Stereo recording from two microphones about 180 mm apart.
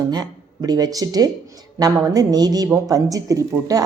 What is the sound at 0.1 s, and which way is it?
Speech, 20° right (ahead or behind).